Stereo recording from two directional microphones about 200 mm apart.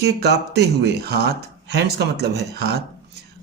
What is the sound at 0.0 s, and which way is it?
Speech, 55° right (ahead or behind).